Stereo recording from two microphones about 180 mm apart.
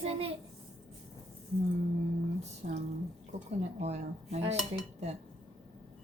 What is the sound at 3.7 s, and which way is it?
Speech, 40° right (ahead or behind).